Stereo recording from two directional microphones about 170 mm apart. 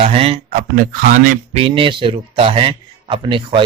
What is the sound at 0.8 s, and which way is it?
Speech, 50° right (ahead or behind).